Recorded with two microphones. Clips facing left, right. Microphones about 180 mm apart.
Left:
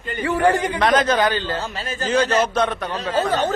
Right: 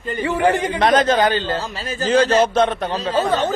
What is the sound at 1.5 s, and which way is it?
A man's voice, 35° right (ahead or behind).